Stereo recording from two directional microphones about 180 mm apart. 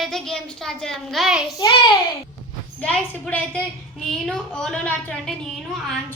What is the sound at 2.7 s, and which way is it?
A woman's voice, 5° left (ahead or behind).